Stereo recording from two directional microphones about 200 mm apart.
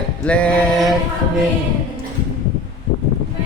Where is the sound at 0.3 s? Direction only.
5° left (ahead or behind).